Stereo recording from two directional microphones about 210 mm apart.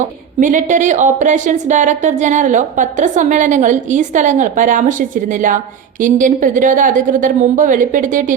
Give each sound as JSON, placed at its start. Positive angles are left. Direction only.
{"t": 0.3, "sound": "a woman's voice", "side_deg": -35}